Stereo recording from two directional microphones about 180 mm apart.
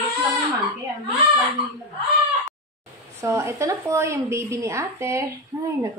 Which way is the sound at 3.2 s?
15° right (ahead or behind).